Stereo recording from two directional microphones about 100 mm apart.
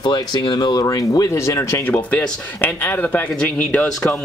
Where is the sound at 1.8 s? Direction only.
15° left (ahead or behind).